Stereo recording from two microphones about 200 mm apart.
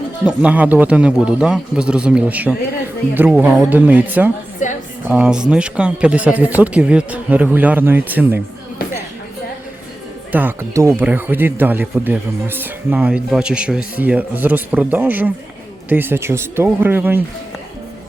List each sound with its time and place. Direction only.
0.3 s speech: 5° right (ahead or behind)
4.6 s a sound: 40° left (ahead or behind)
5.0 s speech: 5° right (ahead or behind)
10.3 s speech: 10° right (ahead or behind)